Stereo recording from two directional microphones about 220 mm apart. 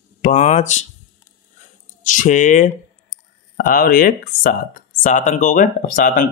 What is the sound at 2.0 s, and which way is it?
Speech, 35° left (ahead or behind).